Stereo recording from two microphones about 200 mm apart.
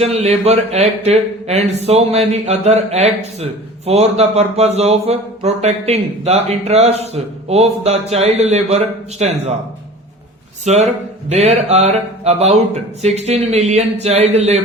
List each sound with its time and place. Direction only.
0.0 s speech: 30° right (ahead or behind)
10.7 s speech: 35° right (ahead or behind)